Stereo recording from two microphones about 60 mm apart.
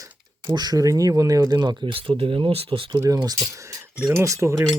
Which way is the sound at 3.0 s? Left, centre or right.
Right.